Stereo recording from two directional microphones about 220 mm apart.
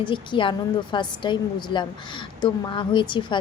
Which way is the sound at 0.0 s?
20° left (ahead or behind).